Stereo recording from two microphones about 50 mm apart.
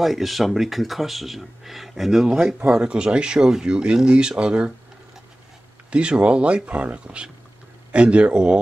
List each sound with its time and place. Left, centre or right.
0.0 s speech: centre; by 4.7 s right
5.9 s speech: right